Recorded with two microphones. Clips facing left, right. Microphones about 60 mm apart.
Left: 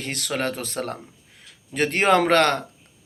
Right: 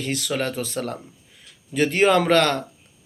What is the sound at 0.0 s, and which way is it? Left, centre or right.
Speech, left.